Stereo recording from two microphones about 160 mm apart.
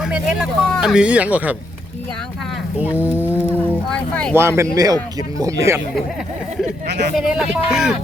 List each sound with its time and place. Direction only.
0.0 s speech: 5° right (ahead or behind)
2.7 s speech: 10° right (ahead or behind)
3.5 s speech: 5° left (ahead or behind)
4.4 s speech: 15° right (ahead or behind)
6.8 s speech: 90° right
7.2 s speech: 5° right (ahead or behind)